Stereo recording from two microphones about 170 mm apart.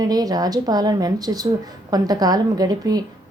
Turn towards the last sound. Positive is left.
turn(degrees=-20)  # may be behind; listen again after turning